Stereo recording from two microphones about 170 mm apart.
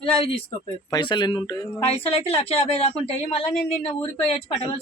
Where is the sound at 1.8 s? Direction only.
35° left (ahead or behind).